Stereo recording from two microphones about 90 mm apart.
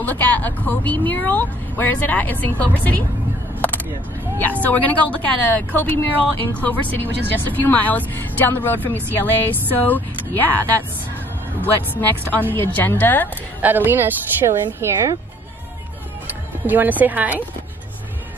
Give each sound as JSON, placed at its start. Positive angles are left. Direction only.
{"t": 0.0, "sound": "speech", "side_deg": 20}
{"t": 4.4, "sound": "speech", "side_deg": 20}
{"t": 13.6, "sound": "speech", "side_deg": -20}
{"t": 16.3, "sound": "speech", "side_deg": -20}